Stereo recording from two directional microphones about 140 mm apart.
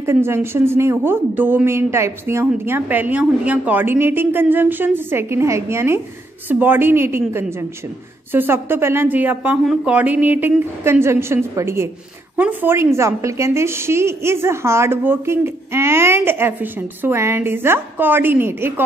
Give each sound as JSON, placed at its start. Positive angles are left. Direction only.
{"t": 0.0, "sound": "speech", "side_deg": -20}